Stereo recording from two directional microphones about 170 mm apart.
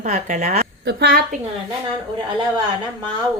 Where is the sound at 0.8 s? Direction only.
65° right (ahead or behind).